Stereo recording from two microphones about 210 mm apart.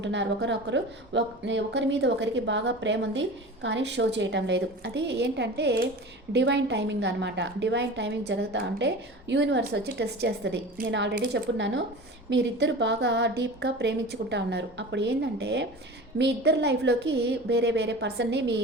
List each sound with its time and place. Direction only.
0.0 s a woman's voice: 60° right (ahead or behind)